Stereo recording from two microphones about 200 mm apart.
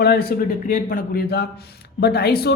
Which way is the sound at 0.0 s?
50° left (ahead or behind).